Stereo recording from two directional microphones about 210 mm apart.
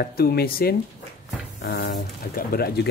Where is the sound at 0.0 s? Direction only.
45° left (ahead or behind).